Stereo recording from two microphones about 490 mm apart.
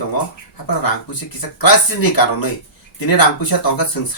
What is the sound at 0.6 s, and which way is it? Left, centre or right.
Speech, left.